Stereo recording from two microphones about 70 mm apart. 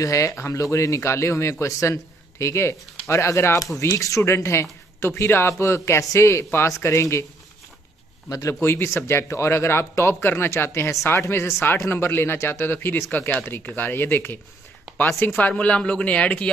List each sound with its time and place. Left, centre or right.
0.0 s speech: left
8.3 s a woman's voice: left; by 16.4 s centre